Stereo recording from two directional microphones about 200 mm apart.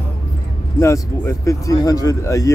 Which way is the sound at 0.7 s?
15° left (ahead or behind).